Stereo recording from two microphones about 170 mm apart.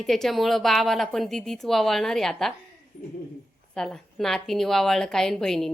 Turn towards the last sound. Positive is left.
turn(degrees=0)  # may be behind; listen again after turning